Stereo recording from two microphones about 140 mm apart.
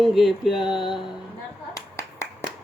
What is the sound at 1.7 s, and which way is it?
Finger snapping, 20° left (ahead or behind).